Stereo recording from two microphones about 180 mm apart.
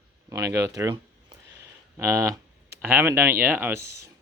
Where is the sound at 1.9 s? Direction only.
15° right (ahead or behind).